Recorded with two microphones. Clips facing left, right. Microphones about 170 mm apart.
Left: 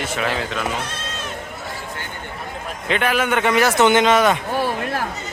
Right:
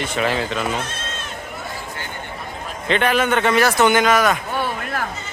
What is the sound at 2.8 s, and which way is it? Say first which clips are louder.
A man's voice: right 2 dB; 5° left (ahead or behind).